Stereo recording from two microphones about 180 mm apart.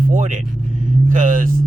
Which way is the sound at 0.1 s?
45° right (ahead or behind).